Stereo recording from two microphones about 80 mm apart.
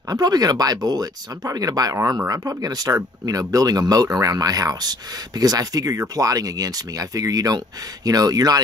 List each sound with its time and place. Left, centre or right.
0.1 s speech: right